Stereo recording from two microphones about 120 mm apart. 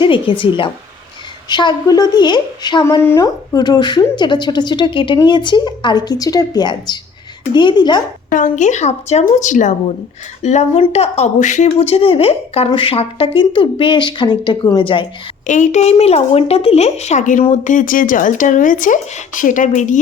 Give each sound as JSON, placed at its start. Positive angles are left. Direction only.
{"t": 0.0, "sound": "a woman's voice", "side_deg": 45}
{"t": 3.0, "sound": "a woman's voice", "side_deg": 25}
{"t": 8.3, "sound": "a woman's voice", "side_deg": 90}
{"t": 10.4, "sound": "a woman's voice", "side_deg": 75}
{"t": 10.8, "sound": "speech", "side_deg": 60}
{"t": 11.8, "sound": "speech", "side_deg": 55}
{"t": 15.4, "sound": "speech", "side_deg": 90}